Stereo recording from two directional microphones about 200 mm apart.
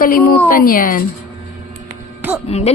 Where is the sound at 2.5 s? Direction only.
30° left (ahead or behind).